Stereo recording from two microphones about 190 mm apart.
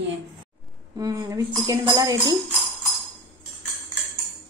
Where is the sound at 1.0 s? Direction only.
20° right (ahead or behind).